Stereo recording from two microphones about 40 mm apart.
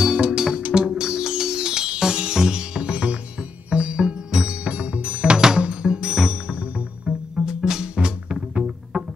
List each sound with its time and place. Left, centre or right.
0.0 s music: right
6.4 s music: right
7.3 s music: centre